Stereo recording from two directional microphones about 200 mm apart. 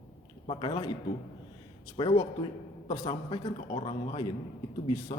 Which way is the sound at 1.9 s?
20° left (ahead or behind).